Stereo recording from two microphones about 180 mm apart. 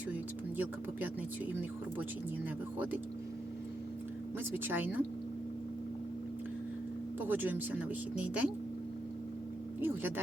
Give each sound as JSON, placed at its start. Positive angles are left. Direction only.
{"t": 0.1, "sound": "a sound", "side_deg": -10}
{"t": 2.7, "sound": "speech", "side_deg": -10}
{"t": 4.5, "sound": "speech", "side_deg": -10}
{"t": 7.2, "sound": "speech", "side_deg": -10}
{"t": 9.8, "sound": "speech", "side_deg": -10}